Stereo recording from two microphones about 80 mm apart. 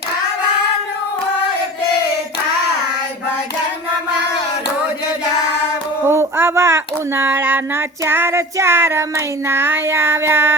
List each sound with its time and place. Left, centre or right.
6.1 s speech: right